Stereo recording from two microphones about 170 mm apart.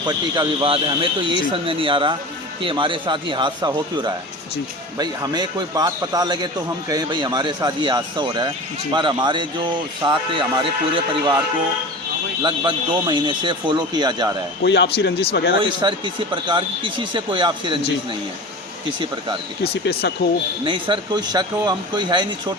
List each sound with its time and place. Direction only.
0.0 s a man's voice: 25° right (ahead or behind)
12.4 s a man's voice: 30° right (ahead or behind)
14.6 s a man's voice: 85° left
15.8 s a man's voice: 30° right (ahead or behind)
19.6 s speech: 70° left (ahead or behind)
20.7 s a man's voice: 30° right (ahead or behind)